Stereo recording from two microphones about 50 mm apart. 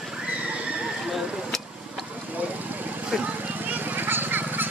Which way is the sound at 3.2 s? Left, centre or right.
Right.